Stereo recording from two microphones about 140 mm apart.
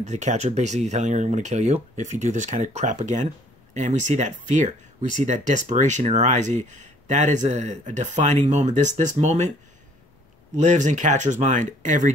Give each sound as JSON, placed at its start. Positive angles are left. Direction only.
{"t": 0.0, "sound": "speech", "side_deg": -55}
{"t": 10.5, "sound": "speech", "side_deg": -60}